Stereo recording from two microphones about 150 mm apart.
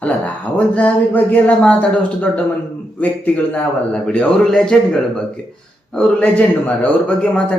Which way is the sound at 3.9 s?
10° left (ahead or behind).